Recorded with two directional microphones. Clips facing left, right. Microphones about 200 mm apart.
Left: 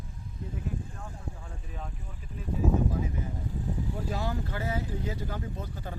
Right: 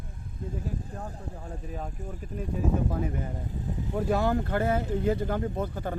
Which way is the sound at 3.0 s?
55° right (ahead or behind).